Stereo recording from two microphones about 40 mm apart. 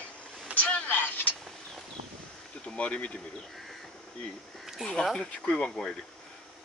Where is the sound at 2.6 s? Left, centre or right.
Left.